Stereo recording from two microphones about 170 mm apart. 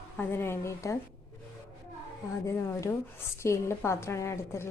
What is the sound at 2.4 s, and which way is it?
A woman's voice, 15° left (ahead or behind).